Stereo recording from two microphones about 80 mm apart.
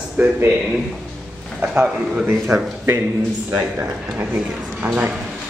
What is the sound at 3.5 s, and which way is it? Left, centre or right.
Speech, centre.